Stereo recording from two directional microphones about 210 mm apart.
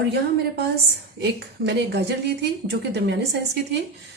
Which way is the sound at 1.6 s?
55° right (ahead or behind).